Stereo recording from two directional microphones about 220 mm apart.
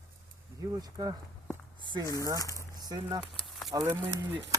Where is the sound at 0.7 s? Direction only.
15° right (ahead or behind).